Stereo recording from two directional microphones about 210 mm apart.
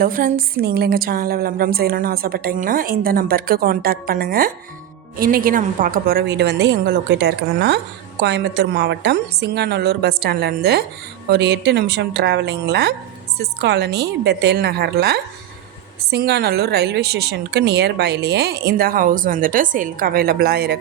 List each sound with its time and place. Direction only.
0.0 s a woman's voice: 40° right (ahead or behind)